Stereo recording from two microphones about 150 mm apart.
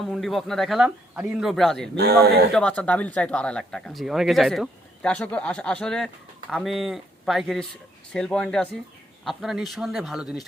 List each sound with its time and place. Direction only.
0.0 s speech: centre (ahead or behind)
2.0 s speech: 90° right
2.5 s speech: 5° left (ahead or behind)